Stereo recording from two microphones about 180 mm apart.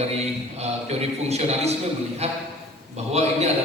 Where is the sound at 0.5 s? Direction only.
35° right (ahead or behind).